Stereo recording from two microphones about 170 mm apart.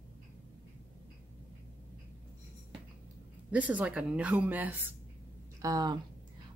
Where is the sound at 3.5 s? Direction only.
10° right (ahead or behind).